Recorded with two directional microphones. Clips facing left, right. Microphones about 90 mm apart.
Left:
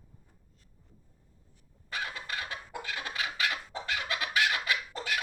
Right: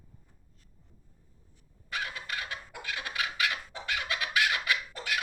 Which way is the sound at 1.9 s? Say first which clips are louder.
Even; 30° left (ahead or behind).